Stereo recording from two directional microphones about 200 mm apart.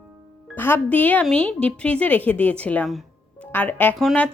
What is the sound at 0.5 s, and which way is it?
A woman's voice, 10° left (ahead or behind).